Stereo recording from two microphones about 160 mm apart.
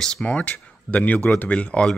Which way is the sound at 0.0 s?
5° left (ahead or behind).